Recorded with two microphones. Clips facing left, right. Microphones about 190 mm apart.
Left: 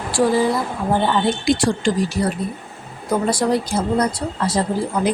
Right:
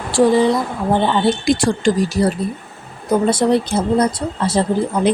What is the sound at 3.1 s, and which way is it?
Speech, 25° right (ahead or behind).